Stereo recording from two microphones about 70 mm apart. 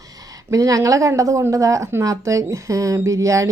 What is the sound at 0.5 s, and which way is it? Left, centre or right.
Speech, right.